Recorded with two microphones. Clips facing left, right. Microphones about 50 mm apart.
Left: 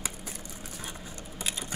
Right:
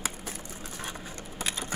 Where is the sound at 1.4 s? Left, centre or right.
Right.